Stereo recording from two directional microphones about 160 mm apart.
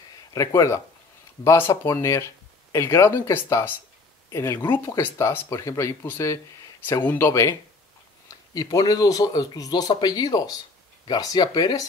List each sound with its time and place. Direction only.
0.3 s speech: 20° left (ahead or behind)
8.5 s speech: 25° left (ahead or behind)